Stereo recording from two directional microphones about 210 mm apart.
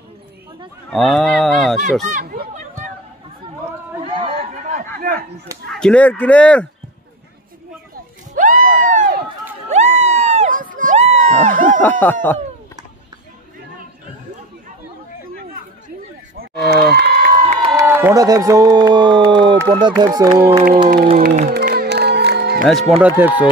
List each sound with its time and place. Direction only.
0.8 s speech: centre (ahead or behind)
2.1 s chatter: 45° right (ahead or behind)
4.0 s chatter: 25° right (ahead or behind)
4.7 s a sound: 40° right (ahead or behind)
5.7 s speech: 5° left (ahead or behind)
8.4 s crowd: 40° right (ahead or behind)
9.7 s a sound: 30° right (ahead or behind)
11.8 s speech: 10° left (ahead or behind)
16.3 s a sound: 50° right (ahead or behind)
17.5 s a sound: 25° right (ahead or behind)
17.8 s speech: 10° right (ahead or behind)
21.5 s music: 45° right (ahead or behind)
22.7 s speech: centre (ahead or behind)